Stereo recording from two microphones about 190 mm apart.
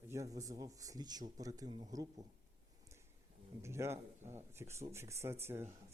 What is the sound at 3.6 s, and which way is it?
Speech, 15° right (ahead or behind).